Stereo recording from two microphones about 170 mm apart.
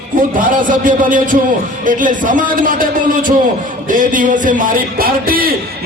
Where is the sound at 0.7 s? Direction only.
50° right (ahead or behind).